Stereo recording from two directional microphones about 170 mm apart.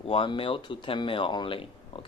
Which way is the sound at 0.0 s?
30° left (ahead or behind).